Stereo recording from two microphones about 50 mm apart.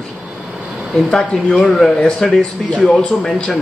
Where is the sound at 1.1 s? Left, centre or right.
Centre.